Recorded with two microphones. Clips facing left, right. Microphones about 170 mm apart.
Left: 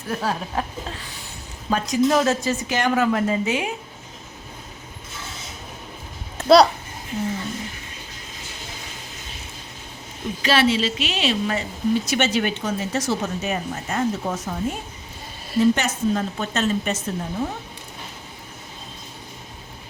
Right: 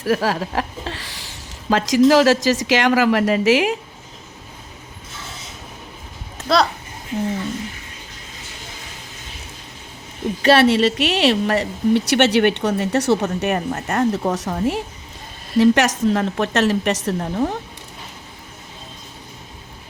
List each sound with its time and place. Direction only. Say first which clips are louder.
0.0 s a woman's voice: right 6 dB; 90° right
10.4 s a woman's voice: right 6 dB; 60° right (ahead or behind)
15.5 s a woman's voice: right 4 dB; 90° right; by 17.6 s 75° right (ahead or behind)